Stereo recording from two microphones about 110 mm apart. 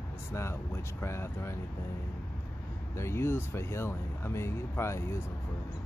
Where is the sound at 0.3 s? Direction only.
25° left (ahead or behind).